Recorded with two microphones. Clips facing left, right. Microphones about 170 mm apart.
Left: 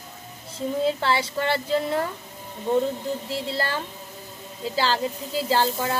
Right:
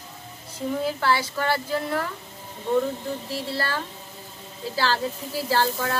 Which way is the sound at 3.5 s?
20° left (ahead or behind).